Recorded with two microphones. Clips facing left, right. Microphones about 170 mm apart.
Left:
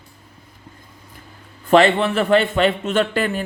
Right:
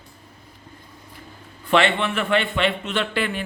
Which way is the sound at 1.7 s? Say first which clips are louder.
Left 6 dB; 40° left (ahead or behind).